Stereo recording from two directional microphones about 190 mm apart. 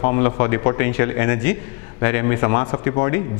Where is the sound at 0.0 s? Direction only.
15° left (ahead or behind).